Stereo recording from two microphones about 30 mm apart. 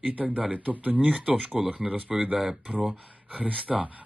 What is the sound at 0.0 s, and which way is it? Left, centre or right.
Speech, right.